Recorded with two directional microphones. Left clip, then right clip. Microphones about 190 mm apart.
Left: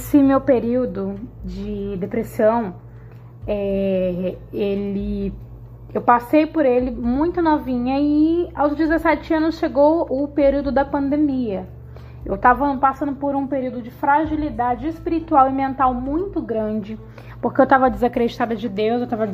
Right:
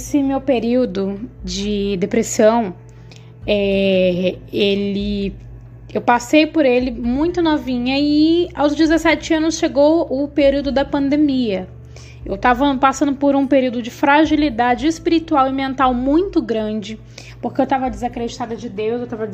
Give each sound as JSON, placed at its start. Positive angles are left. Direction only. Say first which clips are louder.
{"t": 0.7, "sound": "a woman's voice", "louder": "right 4 dB", "side_deg": -30}
{"t": 1.6, "sound": "a woman's voice", "louder": "right 7 dB", "side_deg": -40}
{"t": 4.9, "sound": "a woman's voice", "louder": "right 4 dB", "side_deg": 15}
{"t": 5.9, "sound": "a woman's voice", "louder": "right 1 dB", "side_deg": -15}
{"t": 10.9, "sound": "a woman's voice", "louder": "right 3 dB", "side_deg": -25}
{"t": 12.4, "sound": "a woman's voice", "louder": "right 1 dB", "side_deg": -25}
{"t": 15.0, "sound": "a woman's voice", "louder": "left 1 dB", "side_deg": -20}
{"t": 15.8, "sound": "speech", "louder": "right 6 dB", "side_deg": -40}
{"t": 16.6, "sound": "a woman's voice", "louder": "right 1 dB", "side_deg": -15}
{"t": 17.4, "sound": "a woman's voice", "louder": "left 4 dB", "side_deg": 5}
{"t": 18.1, "sound": "a woman's voice", "louder": "left 4 dB", "side_deg": 40}